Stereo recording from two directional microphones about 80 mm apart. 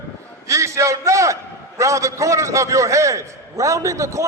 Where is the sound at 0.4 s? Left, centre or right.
Right.